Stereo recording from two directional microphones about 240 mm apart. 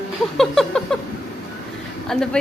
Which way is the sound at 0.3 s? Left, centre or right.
Centre.